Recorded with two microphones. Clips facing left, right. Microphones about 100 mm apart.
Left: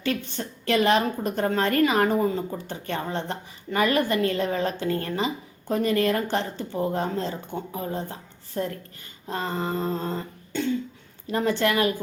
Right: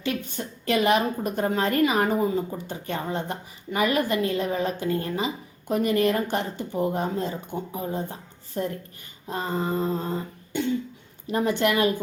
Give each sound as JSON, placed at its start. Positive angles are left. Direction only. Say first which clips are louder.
{"t": 0.0, "sound": "a woman's voice", "louder": "left 1 dB", "side_deg": -15}